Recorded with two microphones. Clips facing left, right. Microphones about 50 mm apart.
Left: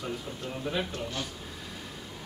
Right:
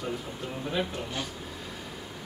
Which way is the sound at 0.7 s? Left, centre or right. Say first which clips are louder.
Right 1 dB; centre.